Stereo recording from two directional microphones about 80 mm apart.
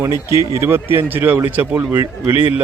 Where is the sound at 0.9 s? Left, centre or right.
Right.